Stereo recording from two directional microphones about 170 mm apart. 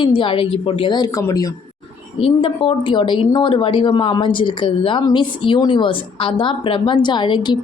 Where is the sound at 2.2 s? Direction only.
30° left (ahead or behind).